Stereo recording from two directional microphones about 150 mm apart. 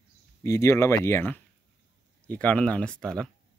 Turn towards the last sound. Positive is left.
turn(degrees=5)  # may be behind; listen again after turning